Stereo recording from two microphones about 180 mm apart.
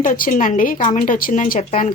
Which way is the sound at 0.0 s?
45° left (ahead or behind).